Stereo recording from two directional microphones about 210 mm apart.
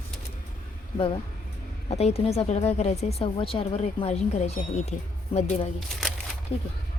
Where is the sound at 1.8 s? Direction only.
30° left (ahead or behind).